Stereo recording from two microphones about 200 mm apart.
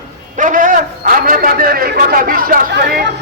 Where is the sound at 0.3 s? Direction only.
40° right (ahead or behind).